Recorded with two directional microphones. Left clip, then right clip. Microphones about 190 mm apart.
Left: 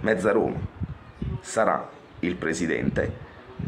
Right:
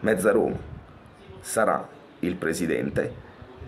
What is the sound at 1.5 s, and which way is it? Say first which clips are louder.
A man's voice: even; centre (ahead or behind).